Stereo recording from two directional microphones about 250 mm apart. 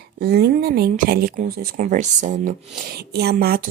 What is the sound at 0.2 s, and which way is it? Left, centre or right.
Speech, right.